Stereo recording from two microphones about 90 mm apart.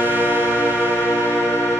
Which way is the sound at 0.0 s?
20° right (ahead or behind).